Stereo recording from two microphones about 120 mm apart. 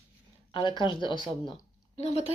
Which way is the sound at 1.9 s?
60° left (ahead or behind).